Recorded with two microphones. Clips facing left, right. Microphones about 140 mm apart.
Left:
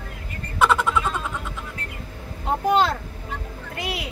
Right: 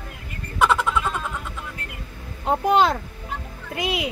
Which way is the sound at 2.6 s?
15° right (ahead or behind).